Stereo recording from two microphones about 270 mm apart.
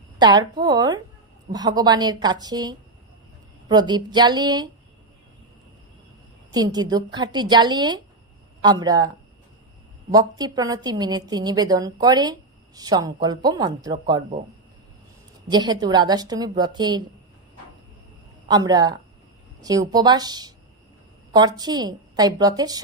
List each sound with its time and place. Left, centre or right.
0.2 s a woman's voice: centre
6.5 s a woman's voice: centre
10.1 s a woman's voice: centre
15.4 s a woman's voice: centre
18.4 s a woman's voice: centre